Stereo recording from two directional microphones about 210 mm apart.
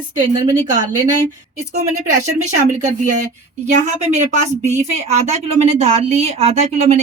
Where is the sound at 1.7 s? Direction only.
35° right (ahead or behind).